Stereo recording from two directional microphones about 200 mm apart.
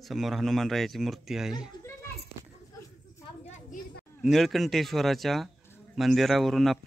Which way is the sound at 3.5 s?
40° left (ahead or behind).